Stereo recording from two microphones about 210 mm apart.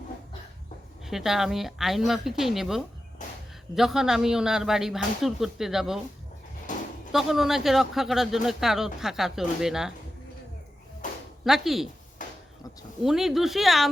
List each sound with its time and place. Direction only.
1.0 s speech: centre (ahead or behind)
6.7 s a sound: 40° left (ahead or behind)
7.1 s speech: centre (ahead or behind)
11.4 s speech: centre (ahead or behind)
13.0 s speech: centre (ahead or behind)